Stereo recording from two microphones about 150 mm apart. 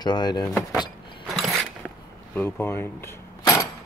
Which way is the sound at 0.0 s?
30° left (ahead or behind).